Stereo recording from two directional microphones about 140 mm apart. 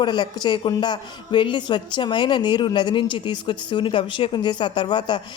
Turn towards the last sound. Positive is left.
turn(degrees=30)  # may be behind; listen again after turning